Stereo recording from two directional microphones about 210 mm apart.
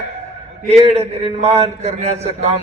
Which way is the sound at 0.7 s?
30° right (ahead or behind).